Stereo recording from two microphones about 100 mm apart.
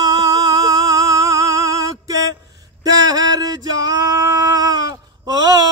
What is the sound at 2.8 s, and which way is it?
Male singing, 40° right (ahead or behind).